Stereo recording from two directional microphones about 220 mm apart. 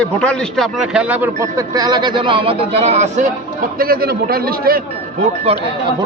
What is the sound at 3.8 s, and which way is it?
A man's voice, 45° right (ahead or behind).